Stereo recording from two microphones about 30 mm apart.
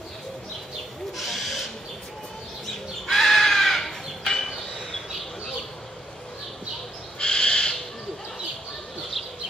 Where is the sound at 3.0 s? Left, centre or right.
Centre.